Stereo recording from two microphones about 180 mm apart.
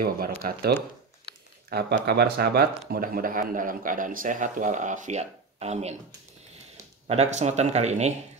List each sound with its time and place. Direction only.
0.4 s speech: 60° right (ahead or behind); by 5.9 s 35° right (ahead or behind)
7.1 s speech: 40° right (ahead or behind)